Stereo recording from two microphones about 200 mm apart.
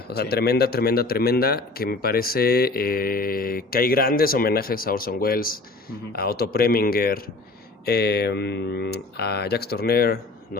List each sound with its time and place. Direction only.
0.2 s a man's voice: 55° left (ahead or behind)